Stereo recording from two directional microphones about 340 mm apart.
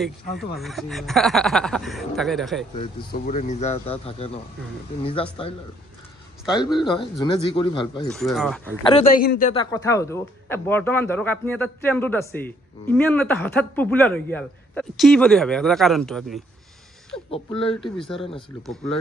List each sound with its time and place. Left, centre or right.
0.0 s speech: centre
2.7 s speech: centre
6.8 s speech: centre
8.1 s speech: centre
8.8 s speech: left; by 16.3 s centre
18.1 s speech: centre